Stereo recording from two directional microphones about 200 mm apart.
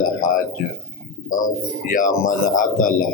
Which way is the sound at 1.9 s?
40° left (ahead or behind).